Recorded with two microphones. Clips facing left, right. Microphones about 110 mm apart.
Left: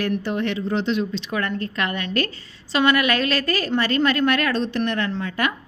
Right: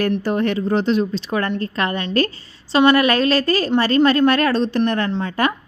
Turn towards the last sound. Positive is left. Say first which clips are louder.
# right 4 dB
turn(degrees=-25)  # may be behind; listen again after turning